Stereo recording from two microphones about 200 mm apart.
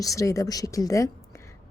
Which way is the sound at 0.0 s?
15° left (ahead or behind).